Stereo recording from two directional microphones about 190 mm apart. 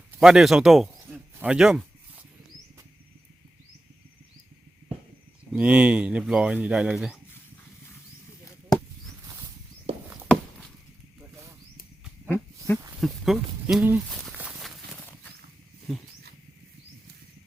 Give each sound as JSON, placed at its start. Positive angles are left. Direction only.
{"t": 0.2, "sound": "speech", "side_deg": 0}
{"t": 5.5, "sound": "speech", "side_deg": -5}
{"t": 9.9, "sound": "a sound", "side_deg": -30}
{"t": 12.3, "sound": "dog", "side_deg": 10}
{"t": 13.0, "sound": "speech", "side_deg": 0}
{"t": 14.1, "sound": "walk", "side_deg": 0}
{"t": 14.3, "sound": "horse", "side_deg": -5}
{"t": 15.9, "sound": "speech", "side_deg": 0}